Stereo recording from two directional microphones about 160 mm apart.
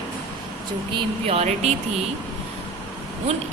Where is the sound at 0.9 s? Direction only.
40° right (ahead or behind).